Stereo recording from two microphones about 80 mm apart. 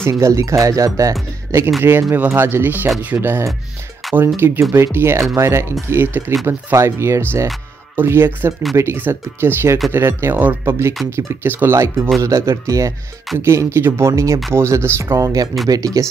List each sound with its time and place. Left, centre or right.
0.1 s speech: right
1.8 s speech: right
4.0 s music: centre
4.4 s speech: right
10.6 s speech: right